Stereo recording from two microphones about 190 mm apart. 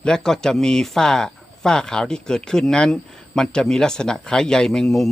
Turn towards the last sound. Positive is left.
turn(degrees=0)  # may be behind; listen again after turning